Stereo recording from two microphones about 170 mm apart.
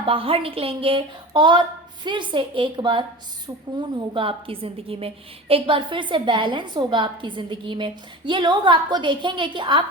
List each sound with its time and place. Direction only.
0.0 s a woman's voice: 30° right (ahead or behind)